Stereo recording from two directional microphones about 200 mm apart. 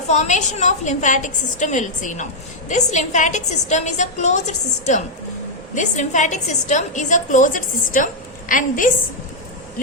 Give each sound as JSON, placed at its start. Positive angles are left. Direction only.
{"t": 0.1, "sound": "a woman's voice", "side_deg": 35}